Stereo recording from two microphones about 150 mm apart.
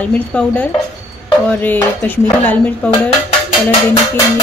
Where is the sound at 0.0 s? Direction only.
10° left (ahead or behind).